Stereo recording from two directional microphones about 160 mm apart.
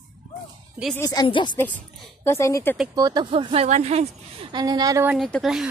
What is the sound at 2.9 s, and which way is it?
Speech, 25° right (ahead or behind).